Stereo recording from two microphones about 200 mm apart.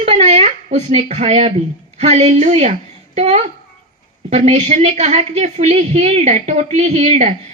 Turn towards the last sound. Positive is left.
turn(degrees=-30)  # may be behind; listen again after turning